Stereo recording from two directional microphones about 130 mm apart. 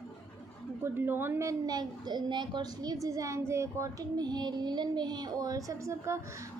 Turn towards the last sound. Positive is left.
turn(degrees=-20)  # may be behind; listen again after turning